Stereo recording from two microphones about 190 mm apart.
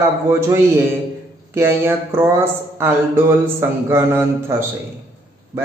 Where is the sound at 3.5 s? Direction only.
15° right (ahead or behind).